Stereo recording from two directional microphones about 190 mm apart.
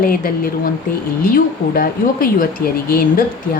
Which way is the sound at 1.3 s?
50° left (ahead or behind).